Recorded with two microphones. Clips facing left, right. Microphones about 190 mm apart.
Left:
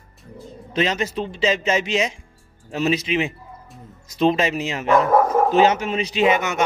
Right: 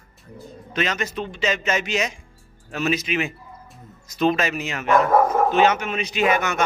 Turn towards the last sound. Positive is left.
turn(degrees=20)  # may be behind; listen again after turning